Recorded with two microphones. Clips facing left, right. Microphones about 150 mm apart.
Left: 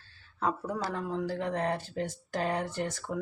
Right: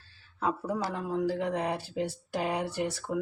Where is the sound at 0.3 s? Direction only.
10° right (ahead or behind).